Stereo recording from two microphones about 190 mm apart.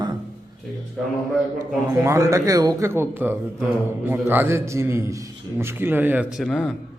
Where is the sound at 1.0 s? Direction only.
Centre (ahead or behind).